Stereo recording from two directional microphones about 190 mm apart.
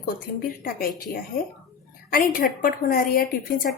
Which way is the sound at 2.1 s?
50° left (ahead or behind).